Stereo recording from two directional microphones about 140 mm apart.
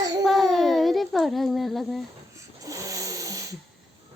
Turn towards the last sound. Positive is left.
turn(degrees=-25)  # may be behind; listen again after turning